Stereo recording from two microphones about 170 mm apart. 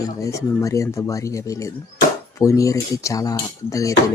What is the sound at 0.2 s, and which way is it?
Speech, 20° left (ahead or behind).